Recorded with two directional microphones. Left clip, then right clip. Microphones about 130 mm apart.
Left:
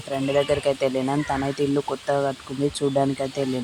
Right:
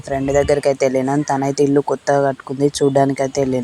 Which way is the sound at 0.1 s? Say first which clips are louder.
Right 6 dB; 25° right (ahead or behind).